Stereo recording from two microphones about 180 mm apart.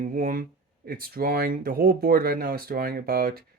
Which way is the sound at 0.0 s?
50° right (ahead or behind).